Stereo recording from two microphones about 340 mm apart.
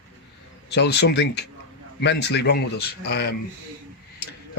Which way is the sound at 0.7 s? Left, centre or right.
Left.